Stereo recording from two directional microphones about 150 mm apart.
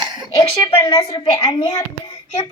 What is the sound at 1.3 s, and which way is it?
Speech, 30° left (ahead or behind).